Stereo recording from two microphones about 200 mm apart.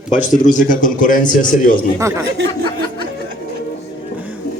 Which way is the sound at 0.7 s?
40° left (ahead or behind).